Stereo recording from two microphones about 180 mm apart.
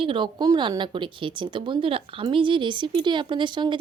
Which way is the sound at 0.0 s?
25° right (ahead or behind).